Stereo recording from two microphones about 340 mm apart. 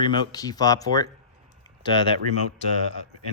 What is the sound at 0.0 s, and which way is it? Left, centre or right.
Speech, centre.